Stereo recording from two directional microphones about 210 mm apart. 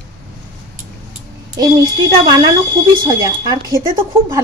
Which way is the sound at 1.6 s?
20° right (ahead or behind).